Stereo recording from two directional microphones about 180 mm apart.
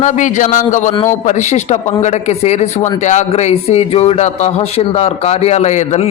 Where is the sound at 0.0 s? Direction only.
45° left (ahead or behind).